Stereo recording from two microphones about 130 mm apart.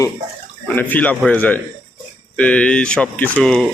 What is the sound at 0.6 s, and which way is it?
Speech, 10° left (ahead or behind).